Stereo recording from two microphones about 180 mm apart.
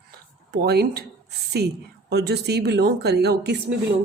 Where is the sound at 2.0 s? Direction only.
65° right (ahead or behind).